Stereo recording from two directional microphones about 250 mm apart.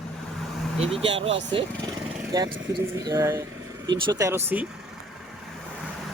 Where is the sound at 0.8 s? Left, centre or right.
Right.